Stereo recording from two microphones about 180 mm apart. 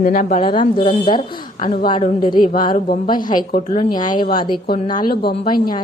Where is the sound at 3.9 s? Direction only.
25° left (ahead or behind).